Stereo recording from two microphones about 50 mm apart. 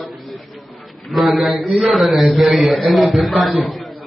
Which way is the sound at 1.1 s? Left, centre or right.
Centre.